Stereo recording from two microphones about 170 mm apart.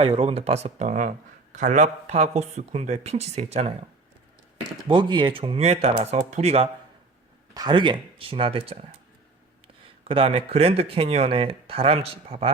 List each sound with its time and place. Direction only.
0.0 s speech: 35° right (ahead or behind)
4.9 s speech: 30° right (ahead or behind)
7.5 s speech: 25° right (ahead or behind)
10.0 s speech: 35° right (ahead or behind)